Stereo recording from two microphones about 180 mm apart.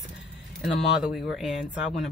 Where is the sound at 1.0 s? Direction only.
Centre (ahead or behind).